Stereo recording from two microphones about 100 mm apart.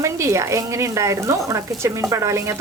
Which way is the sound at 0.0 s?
30° right (ahead or behind).